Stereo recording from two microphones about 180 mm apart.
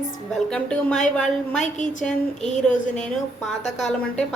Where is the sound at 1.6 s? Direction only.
45° left (ahead or behind).